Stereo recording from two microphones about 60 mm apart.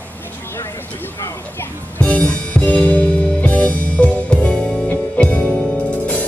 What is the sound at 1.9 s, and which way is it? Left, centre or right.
Music, left.